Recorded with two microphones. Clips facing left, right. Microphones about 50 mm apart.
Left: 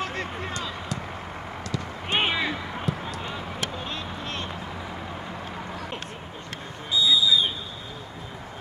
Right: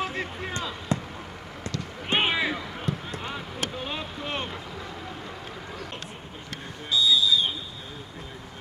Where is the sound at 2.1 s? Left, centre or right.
Centre.